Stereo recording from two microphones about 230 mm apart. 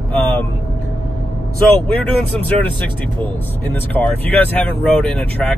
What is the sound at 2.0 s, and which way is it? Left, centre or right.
Speech, centre.